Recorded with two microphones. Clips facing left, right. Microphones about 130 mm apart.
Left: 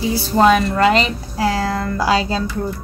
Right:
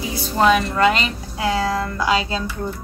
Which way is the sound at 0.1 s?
30° left (ahead or behind).